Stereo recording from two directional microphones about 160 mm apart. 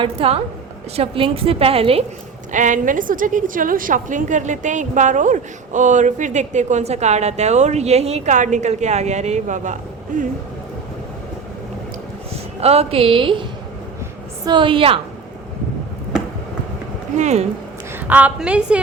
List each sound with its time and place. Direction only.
0.0 s a woman's voice: 35° right (ahead or behind)
2.5 s a woman's voice: 50° right (ahead or behind)
12.5 s a woman's voice: 40° right (ahead or behind)
14.4 s a woman's voice: 30° right (ahead or behind)
17.2 s a woman's voice: 45° right (ahead or behind)
18.1 s a woman's voice: 10° right (ahead or behind)